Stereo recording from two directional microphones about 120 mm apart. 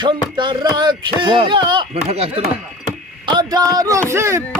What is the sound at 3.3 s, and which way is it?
Speech, 35° right (ahead or behind).